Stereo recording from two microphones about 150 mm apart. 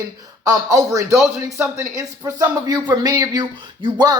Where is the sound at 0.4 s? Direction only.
25° right (ahead or behind).